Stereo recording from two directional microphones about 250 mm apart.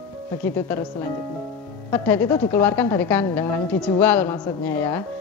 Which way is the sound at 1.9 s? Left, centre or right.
Centre.